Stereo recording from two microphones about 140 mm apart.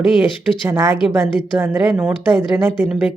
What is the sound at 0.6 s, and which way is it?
Speech, 20° right (ahead or behind).